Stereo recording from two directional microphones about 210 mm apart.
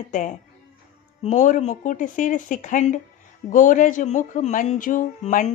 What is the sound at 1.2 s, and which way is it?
A woman's voice, 35° left (ahead or behind).